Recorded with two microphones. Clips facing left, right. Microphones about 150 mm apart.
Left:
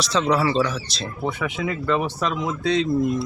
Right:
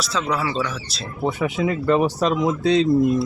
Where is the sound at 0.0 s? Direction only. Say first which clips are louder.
Left 3 dB; 5° right (ahead or behind).